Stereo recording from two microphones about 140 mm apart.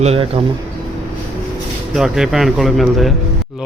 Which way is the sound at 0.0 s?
45° right (ahead or behind).